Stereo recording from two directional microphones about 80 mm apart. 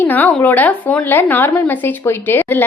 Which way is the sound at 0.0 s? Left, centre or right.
Left.